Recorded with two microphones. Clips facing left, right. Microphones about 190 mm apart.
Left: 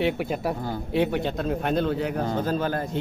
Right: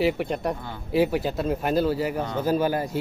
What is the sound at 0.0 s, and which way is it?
Speech, centre (ahead or behind).